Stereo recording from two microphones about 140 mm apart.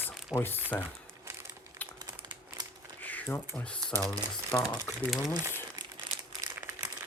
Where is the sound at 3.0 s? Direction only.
10° left (ahead or behind).